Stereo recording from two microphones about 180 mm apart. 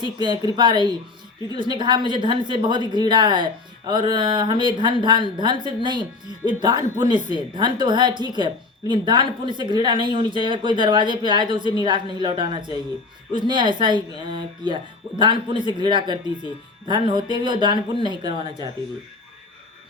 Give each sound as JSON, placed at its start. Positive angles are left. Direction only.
{"t": 0.0, "sound": "a woman's voice", "side_deg": -25}